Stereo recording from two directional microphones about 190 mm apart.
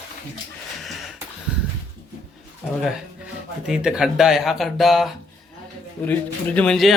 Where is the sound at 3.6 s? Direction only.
5° right (ahead or behind).